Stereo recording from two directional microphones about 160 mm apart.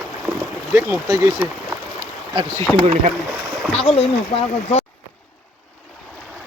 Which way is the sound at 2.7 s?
5° left (ahead or behind).